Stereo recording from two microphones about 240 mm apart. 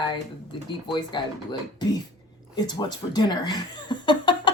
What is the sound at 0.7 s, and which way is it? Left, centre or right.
Speech, centre.